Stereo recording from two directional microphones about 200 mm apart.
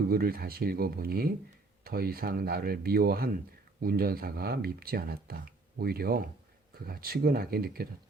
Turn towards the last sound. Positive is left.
turn(degrees=-50)  # may be behind; listen again after turning